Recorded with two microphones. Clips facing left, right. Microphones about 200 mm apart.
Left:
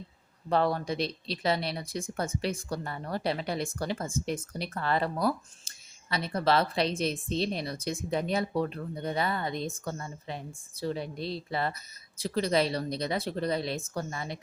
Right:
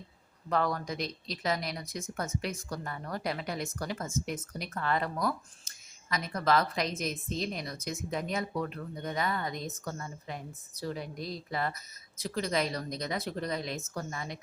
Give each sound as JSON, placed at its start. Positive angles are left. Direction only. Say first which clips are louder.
{"t": 0.5, "sound": "speech", "louder": "left 4 dB", "side_deg": 30}